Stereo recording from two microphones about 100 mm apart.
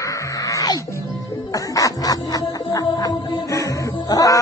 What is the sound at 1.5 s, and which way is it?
Music, 35° left (ahead or behind).